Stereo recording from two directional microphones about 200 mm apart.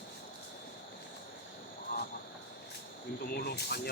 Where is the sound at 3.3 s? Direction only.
55° left (ahead or behind).